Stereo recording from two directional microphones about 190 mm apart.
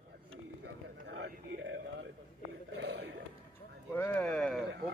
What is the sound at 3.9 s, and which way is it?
Speech, 10° left (ahead or behind).